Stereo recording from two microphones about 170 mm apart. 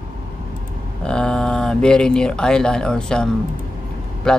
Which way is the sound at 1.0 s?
5° left (ahead or behind).